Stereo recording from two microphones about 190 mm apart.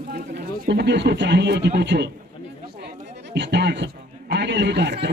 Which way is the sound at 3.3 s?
65° right (ahead or behind).